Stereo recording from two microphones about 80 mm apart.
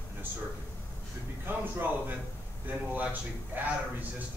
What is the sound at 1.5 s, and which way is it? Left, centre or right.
A man's voice, right.